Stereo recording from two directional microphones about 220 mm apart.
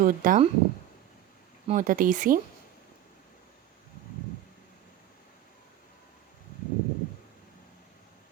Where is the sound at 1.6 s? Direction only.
35° right (ahead or behind).